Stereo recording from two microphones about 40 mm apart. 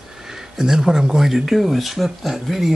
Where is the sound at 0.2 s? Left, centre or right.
Centre.